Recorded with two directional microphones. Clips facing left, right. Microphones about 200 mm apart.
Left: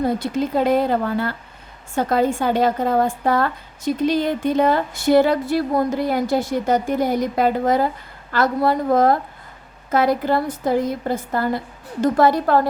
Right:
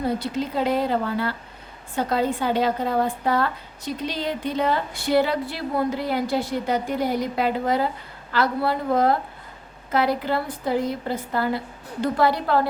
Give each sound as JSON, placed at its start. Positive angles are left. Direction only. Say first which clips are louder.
{"t": 0.2, "sound": "a woman's voice", "louder": "left 5 dB", "side_deg": 50}